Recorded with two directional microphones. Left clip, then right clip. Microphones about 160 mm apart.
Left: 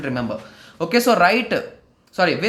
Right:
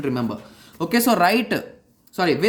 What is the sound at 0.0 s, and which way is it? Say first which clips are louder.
Speech: left 1 dB; 30° right (ahead or behind).